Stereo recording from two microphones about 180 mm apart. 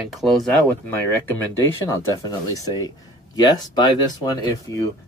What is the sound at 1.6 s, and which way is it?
Speech, 20° left (ahead or behind).